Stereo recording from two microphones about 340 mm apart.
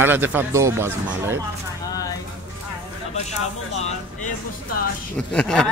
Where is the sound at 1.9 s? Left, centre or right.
Centre.